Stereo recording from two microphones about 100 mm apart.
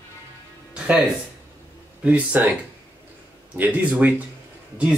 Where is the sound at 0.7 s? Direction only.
10° right (ahead or behind).